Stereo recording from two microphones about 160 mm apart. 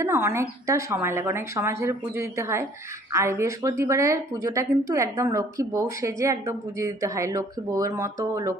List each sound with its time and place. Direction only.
0.0 s a woman's voice: 15° right (ahead or behind)